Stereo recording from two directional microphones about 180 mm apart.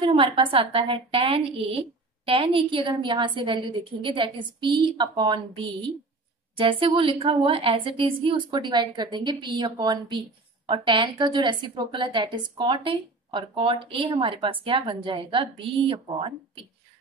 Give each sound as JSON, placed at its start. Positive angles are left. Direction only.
{"t": 0.0, "sound": "a woman's voice", "side_deg": -30}